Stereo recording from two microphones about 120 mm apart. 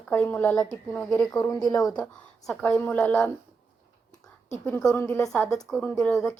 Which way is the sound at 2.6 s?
10° left (ahead or behind).